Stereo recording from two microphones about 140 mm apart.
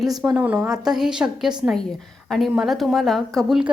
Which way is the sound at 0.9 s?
5° right (ahead or behind).